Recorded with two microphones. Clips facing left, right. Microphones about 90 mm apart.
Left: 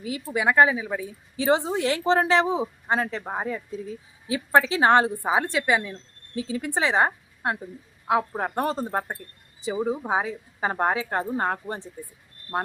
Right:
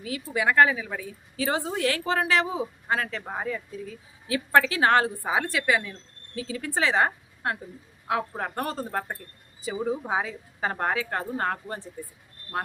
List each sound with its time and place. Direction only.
0.0 s a woman's voice: 20° left (ahead or behind)